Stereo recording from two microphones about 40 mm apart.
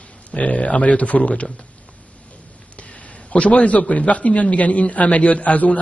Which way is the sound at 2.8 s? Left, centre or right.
Left.